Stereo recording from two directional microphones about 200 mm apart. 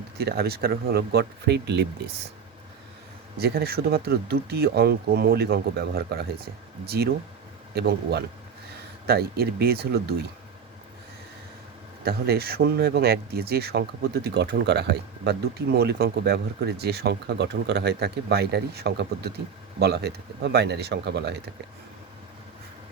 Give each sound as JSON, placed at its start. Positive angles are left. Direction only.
{"t": 0.2, "sound": "speech", "side_deg": -50}
{"t": 3.3, "sound": "speech", "side_deg": -50}
{"t": 12.0, "sound": "speech", "side_deg": -50}